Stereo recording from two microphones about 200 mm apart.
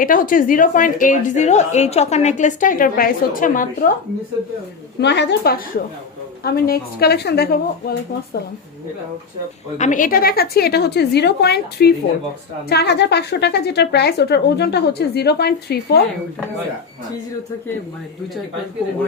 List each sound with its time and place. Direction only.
0.0 s a woman's voice: 45° left (ahead or behind)
4.9 s a woman's voice: 55° left (ahead or behind)
9.7 s a woman's voice: 40° left (ahead or behind); by 16.0 s 55° left (ahead or behind)